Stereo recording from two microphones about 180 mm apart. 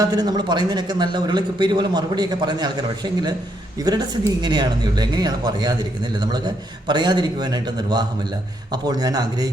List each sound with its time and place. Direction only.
0.0 s speech: 20° right (ahead or behind)